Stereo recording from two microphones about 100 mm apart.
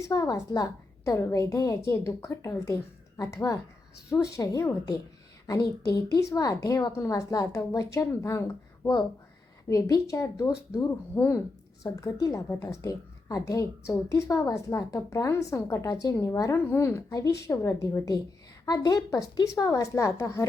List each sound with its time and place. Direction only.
0.0 s a woman's voice: 35° left (ahead or behind)